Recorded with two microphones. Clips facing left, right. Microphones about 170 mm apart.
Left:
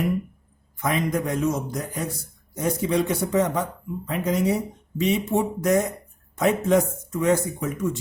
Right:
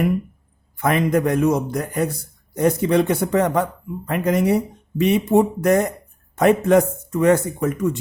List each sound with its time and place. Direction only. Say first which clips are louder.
0.8 s speech: right 6 dB; 60° right (ahead or behind)